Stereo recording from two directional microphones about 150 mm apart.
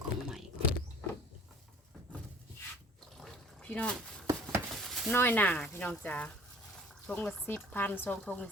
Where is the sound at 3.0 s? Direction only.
5° left (ahead or behind).